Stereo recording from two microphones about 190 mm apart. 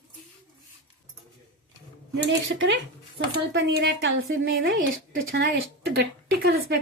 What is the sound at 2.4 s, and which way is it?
A woman's voice, 75° right (ahead or behind).